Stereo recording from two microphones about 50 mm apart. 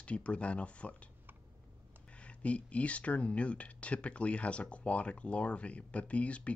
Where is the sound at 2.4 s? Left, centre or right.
Left.